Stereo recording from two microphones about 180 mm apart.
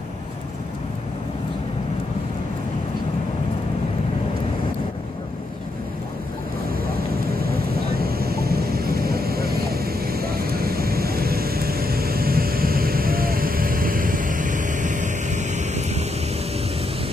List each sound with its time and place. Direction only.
8.0 s vehicle: 60° right (ahead or behind); by 16.0 s 40° right (ahead or behind)